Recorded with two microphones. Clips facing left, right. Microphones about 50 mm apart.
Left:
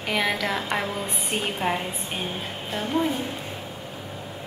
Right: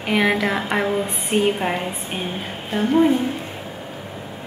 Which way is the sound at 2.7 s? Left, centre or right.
Right.